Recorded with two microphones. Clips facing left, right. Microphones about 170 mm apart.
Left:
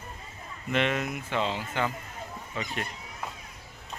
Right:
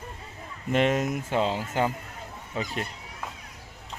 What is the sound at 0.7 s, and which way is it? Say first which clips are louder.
Speech: right 4 dB; 40° right (ahead or behind).